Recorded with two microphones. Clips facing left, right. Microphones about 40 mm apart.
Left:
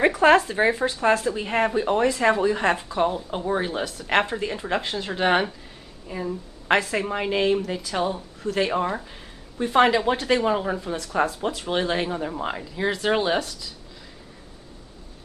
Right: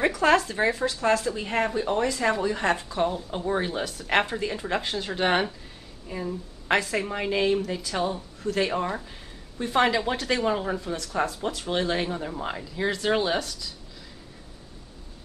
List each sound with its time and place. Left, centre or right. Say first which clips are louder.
0.1 s a woman's voice: left 4 dB; left
3.4 s a woman's voice: left 1 dB; centre